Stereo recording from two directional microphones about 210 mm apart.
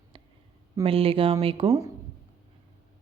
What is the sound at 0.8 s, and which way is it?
Speech, 25° right (ahead or behind).